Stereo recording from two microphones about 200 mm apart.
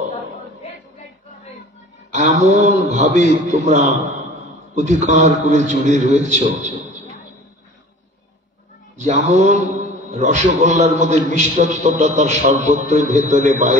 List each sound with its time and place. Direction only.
2.4 s a man's voice: 35° right (ahead or behind)
8.9 s a man's voice: 35° right (ahead or behind)